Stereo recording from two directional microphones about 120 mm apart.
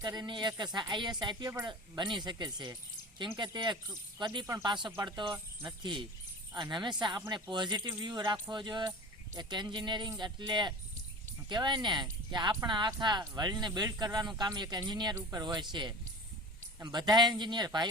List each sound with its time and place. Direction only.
0.0 s speech: 35° right (ahead or behind)